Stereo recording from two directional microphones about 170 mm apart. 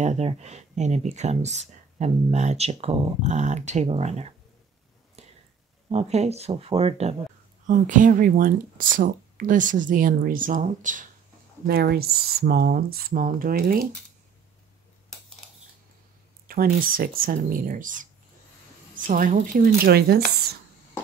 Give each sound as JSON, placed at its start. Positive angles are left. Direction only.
{"t": 0.0, "sound": "speech", "side_deg": -40}
{"t": 5.9, "sound": "speech", "side_deg": -40}
{"t": 7.6, "sound": "speech", "side_deg": -50}
{"t": 11.6, "sound": "speech", "side_deg": -70}
{"t": 16.4, "sound": "speech", "side_deg": -60}